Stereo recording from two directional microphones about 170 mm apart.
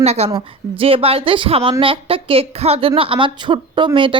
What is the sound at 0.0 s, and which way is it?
A woman's voice, 40° right (ahead or behind).